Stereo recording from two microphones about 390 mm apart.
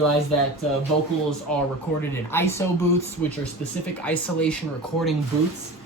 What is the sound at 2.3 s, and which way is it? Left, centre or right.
Speech, centre.